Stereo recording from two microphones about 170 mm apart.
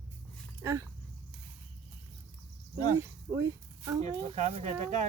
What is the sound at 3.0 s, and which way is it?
Speech, 15° right (ahead or behind).